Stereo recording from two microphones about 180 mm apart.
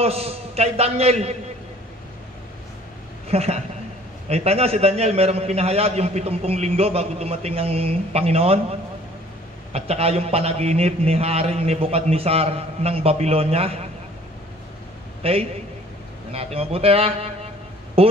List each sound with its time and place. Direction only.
0.0 s a man's voice: 35° right (ahead or behind)
3.3 s a woman's voice: 35° right (ahead or behind)
9.7 s a man's voice: 35° right (ahead or behind)
15.2 s a man's voice: 30° right (ahead or behind)